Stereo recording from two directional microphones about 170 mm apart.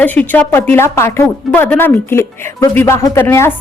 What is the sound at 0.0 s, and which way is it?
A woman's voice, 10° left (ahead or behind).